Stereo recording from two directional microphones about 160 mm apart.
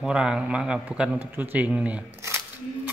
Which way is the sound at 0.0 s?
5° right (ahead or behind).